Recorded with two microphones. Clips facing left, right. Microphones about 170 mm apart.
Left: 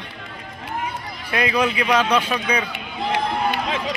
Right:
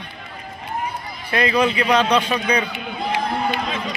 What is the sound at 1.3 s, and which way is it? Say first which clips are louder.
Speech: right 2 dB; 10° left (ahead or behind).